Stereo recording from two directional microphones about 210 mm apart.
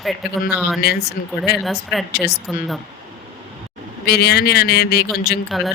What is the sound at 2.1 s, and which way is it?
Speech, 50° left (ahead or behind).